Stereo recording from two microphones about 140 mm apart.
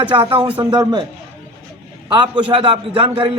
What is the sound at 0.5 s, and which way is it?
Speech, 30° right (ahead or behind).